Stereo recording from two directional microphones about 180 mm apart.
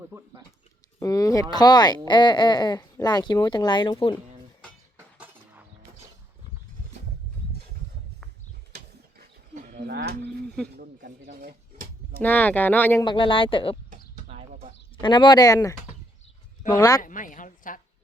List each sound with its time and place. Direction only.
0.9 s speech: 20° left (ahead or behind)
8.7 s a sound: 60° right (ahead or behind)
9.7 s livestock: 70° right (ahead or behind)
10.8 s snake: 45° right (ahead or behind)
11.3 s typewriter: 65° right (ahead or behind)
12.2 s speech: 10° left (ahead or behind)
13.1 s speech: 30° left (ahead or behind)
15.0 s speech: 25° left (ahead or behind)
17.0 s a sound: 45° left (ahead or behind)